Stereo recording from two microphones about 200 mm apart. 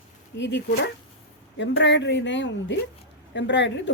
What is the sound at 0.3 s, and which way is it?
Speech, 60° left (ahead or behind).